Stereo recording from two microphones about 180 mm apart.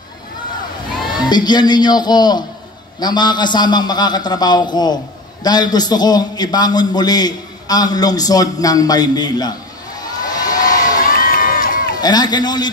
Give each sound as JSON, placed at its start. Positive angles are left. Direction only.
{"t": 1.3, "sound": "a man's voice", "side_deg": 25}
{"t": 10.3, "sound": "a sound", "side_deg": 20}
{"t": 11.0, "sound": "run", "side_deg": 50}
{"t": 12.0, "sound": "a man's voice", "side_deg": 20}